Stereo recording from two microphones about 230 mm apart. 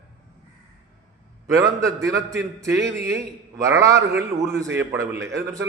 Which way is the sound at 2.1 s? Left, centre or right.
Centre.